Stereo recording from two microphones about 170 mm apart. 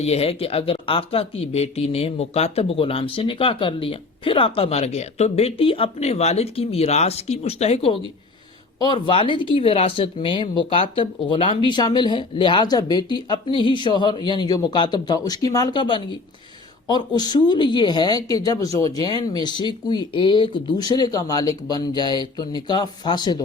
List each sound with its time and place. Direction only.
0.0 s speech: 35° left (ahead or behind)
17.2 s speech: 25° left (ahead or behind)